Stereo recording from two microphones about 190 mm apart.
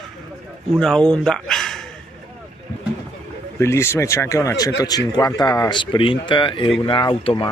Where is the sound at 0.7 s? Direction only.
5° left (ahead or behind).